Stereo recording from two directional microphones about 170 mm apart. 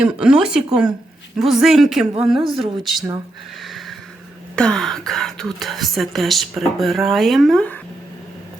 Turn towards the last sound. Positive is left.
turn(degrees=5)  # may be behind; listen again after turning